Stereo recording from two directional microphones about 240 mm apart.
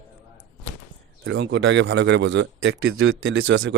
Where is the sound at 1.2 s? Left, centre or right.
Right.